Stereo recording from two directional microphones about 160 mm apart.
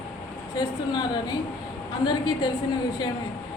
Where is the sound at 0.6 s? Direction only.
25° left (ahead or behind).